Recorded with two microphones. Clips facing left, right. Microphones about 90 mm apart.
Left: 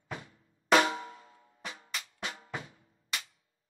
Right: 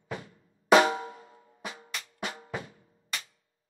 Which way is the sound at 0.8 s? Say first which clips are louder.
Right 4 dB; 35° right (ahead or behind).